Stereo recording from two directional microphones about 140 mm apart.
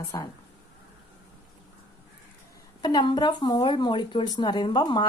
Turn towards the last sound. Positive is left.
turn(degrees=35)  # may be behind; listen again after turning